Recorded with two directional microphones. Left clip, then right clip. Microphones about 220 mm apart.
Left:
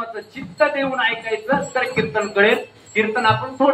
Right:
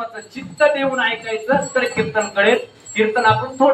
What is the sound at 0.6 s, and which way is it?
Speech, 50° left (ahead or behind).